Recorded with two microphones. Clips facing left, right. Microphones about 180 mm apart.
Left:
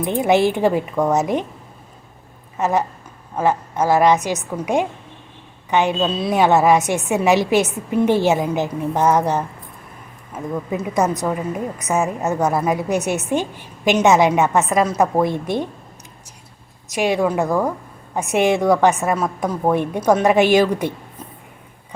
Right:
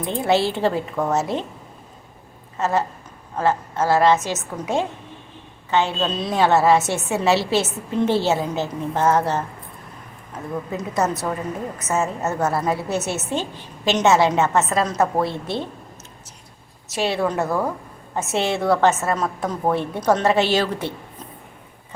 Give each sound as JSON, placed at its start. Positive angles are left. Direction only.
{"t": 0.0, "sound": "a woman's voice", "side_deg": 15}
{"t": 2.6, "sound": "a woman's voice", "side_deg": 15}
{"t": 10.9, "sound": "a woman's voice", "side_deg": 15}
{"t": 16.9, "sound": "a woman's voice", "side_deg": 15}